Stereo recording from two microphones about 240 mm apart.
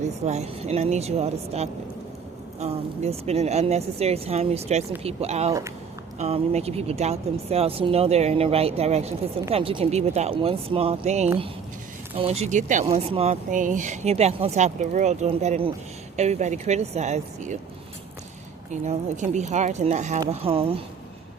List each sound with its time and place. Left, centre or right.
0.0 s speech: right
18.7 s speech: right